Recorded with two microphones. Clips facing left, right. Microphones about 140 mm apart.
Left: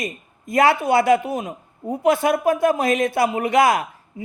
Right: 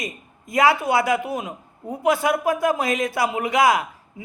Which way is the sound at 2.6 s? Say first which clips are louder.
Left 3 dB; 55° left (ahead or behind).